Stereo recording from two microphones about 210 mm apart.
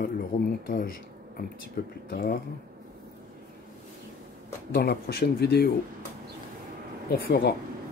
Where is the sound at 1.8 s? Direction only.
45° left (ahead or behind).